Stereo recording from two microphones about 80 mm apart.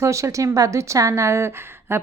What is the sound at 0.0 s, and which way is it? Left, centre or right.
A woman's voice, right.